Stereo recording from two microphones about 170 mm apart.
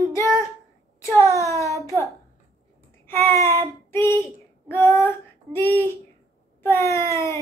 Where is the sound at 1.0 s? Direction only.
15° left (ahead or behind).